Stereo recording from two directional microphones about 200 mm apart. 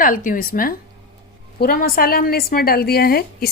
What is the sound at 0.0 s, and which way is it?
A woman's voice, 45° left (ahead or behind).